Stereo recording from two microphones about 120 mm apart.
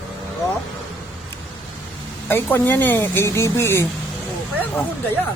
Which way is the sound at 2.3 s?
15° left (ahead or behind).